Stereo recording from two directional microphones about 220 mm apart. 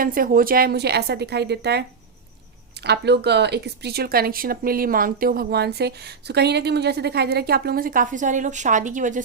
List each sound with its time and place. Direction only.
0.0 s speech: 40° right (ahead or behind)
2.8 s speech: 50° right (ahead or behind)